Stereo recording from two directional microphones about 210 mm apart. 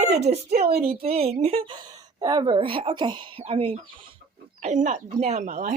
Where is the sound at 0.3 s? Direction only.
30° right (ahead or behind).